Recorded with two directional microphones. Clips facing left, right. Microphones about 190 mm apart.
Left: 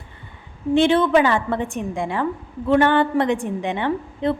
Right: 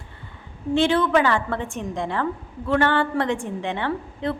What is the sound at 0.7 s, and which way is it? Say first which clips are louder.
A woman's voice: left 3 dB; 20° left (ahead or behind).